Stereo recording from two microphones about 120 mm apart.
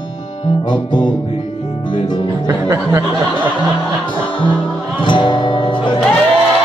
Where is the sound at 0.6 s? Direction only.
40° left (ahead or behind).